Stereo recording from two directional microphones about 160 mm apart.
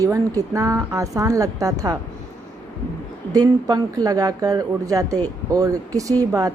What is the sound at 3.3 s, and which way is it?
Speech, 25° right (ahead or behind).